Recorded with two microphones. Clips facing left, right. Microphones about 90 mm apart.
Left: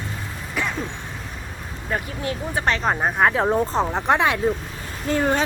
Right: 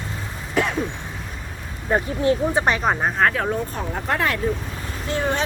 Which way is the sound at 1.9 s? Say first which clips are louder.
Right 7 dB; 30° right (ahead or behind).